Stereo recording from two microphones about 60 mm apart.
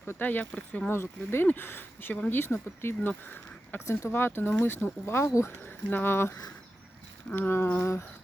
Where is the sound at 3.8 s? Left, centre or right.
Left.